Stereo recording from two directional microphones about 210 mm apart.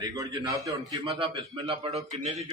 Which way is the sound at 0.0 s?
15° right (ahead or behind).